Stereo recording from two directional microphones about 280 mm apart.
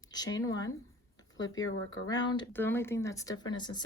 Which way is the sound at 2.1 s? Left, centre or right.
Centre.